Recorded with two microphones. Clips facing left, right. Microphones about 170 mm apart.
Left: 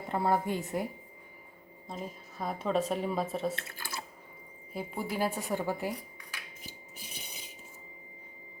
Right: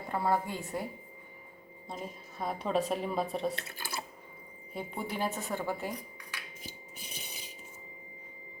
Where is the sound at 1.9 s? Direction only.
Centre (ahead or behind).